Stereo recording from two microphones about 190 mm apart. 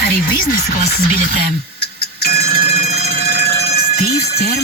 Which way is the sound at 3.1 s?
45° left (ahead or behind).